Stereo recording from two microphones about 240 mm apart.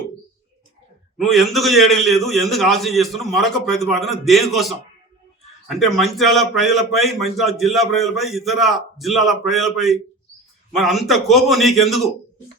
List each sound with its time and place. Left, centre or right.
1.2 s a man's voice: centre